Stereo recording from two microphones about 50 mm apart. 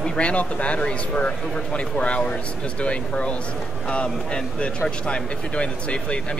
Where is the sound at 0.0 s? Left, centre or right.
Left.